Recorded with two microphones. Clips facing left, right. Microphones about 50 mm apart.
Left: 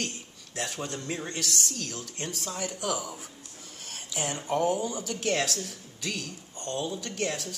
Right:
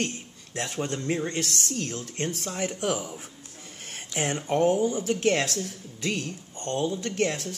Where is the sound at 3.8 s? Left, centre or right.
Right.